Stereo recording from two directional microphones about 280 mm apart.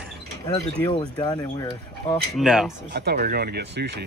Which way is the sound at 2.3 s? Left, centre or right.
Centre.